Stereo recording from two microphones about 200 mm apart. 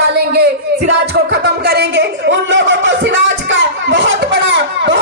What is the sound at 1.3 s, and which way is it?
Speech, 55° right (ahead or behind).